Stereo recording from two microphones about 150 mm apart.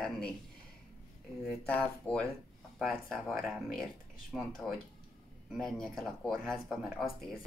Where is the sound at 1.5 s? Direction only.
10° left (ahead or behind).